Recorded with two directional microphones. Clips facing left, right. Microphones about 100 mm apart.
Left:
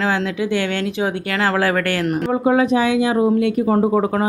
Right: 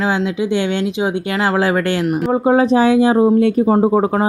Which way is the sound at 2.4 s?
30° right (ahead or behind).